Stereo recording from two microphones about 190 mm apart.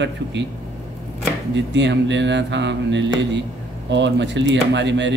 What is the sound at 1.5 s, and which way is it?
Speech, 70° right (ahead or behind).